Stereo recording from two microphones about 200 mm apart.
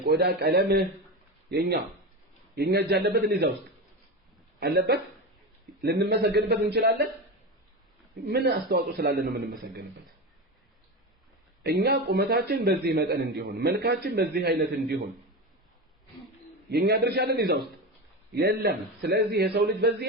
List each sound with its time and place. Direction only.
0.0 s a man's voice: 50° right (ahead or behind)
4.6 s a man's voice: 50° right (ahead or behind)
8.3 s a man's voice: 55° right (ahead or behind)
11.6 s a man's voice: 55° right (ahead or behind)
16.6 s a man's voice: 55° right (ahead or behind)